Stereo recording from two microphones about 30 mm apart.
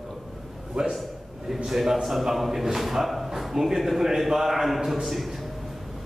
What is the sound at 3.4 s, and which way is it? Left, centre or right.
A man's voice, centre.